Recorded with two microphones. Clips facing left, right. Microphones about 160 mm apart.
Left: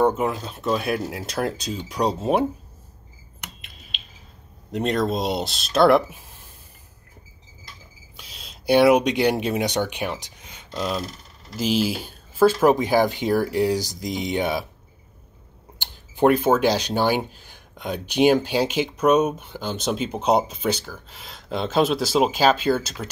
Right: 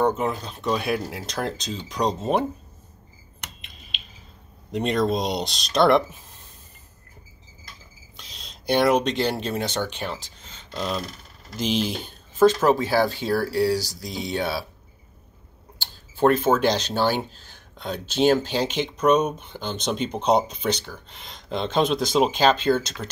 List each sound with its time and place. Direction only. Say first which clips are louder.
0.0 s speech: left 2 dB; 10° left (ahead or behind)
3.3 s a sound: left 1 dB; centre (ahead or behind)
4.7 s speech: even; centre (ahead or behind)
8.2 s speech: left 1 dB; 5° left (ahead or behind)
15.8 s speech: left 1 dB; 15° left (ahead or behind)